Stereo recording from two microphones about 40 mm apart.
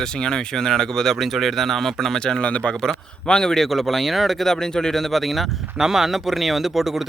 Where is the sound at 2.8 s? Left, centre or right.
Centre.